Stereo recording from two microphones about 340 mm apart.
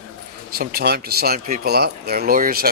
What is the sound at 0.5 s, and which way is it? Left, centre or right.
A man's voice, right.